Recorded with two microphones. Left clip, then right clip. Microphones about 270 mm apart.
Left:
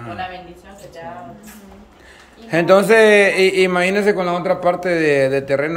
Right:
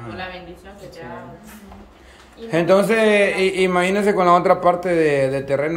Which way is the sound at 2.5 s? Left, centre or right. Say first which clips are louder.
Left 4 dB; centre.